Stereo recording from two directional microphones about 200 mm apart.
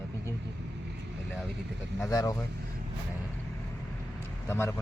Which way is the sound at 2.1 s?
15° left (ahead or behind).